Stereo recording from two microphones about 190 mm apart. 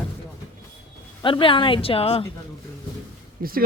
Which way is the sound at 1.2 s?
25° left (ahead or behind).